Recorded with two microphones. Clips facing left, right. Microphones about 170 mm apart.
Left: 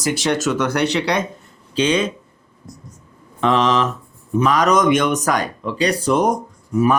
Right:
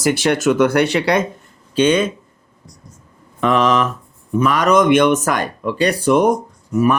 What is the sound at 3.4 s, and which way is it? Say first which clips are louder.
Speech: right 1 dB; 55° right (ahead or behind).